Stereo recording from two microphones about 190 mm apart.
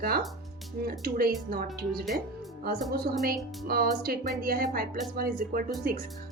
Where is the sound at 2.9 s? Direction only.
55° right (ahead or behind).